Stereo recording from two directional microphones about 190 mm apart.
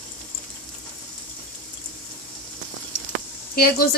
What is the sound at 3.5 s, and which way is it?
Speech, 50° left (ahead or behind).